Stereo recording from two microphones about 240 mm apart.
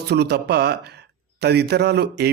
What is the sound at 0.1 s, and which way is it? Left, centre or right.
Speech, right.